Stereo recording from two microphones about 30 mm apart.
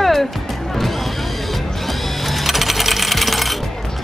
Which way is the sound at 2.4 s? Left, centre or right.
Centre.